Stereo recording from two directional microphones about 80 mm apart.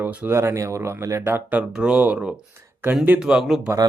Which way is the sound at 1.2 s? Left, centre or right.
Right.